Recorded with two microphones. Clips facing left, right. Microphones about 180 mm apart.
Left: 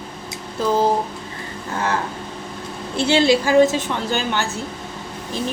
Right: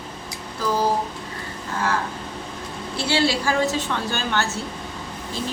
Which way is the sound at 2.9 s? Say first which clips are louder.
Left 6 dB; 20° left (ahead or behind).